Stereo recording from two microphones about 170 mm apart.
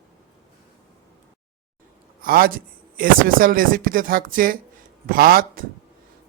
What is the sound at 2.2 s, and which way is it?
Speech, 60° right (ahead or behind).